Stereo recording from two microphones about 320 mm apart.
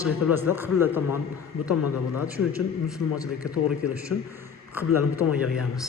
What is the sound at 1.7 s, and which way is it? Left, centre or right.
Speech, left.